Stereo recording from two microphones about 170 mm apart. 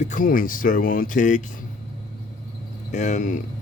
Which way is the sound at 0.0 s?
50° left (ahead or behind).